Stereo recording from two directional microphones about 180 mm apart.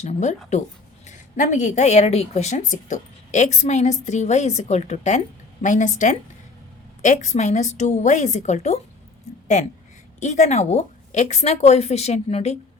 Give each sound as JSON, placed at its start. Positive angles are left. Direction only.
{"t": 0.0, "sound": "a woman's voice", "side_deg": 40}
{"t": 10.2, "sound": "a woman's voice", "side_deg": 40}